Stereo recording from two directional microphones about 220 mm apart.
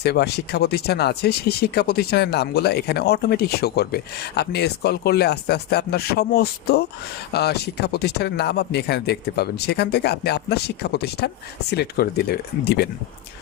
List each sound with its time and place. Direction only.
0.0 s speech: 50° left (ahead or behind)